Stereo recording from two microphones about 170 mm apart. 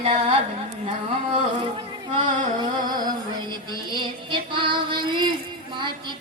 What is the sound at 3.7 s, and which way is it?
Female singing, 25° right (ahead or behind).